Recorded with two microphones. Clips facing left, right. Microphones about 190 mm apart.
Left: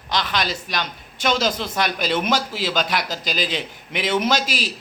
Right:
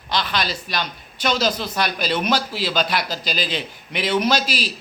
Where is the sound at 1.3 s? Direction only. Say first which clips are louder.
Even; 20° left (ahead or behind).